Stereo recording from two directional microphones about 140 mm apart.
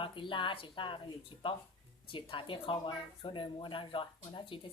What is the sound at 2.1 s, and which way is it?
Speech, 35° left (ahead or behind).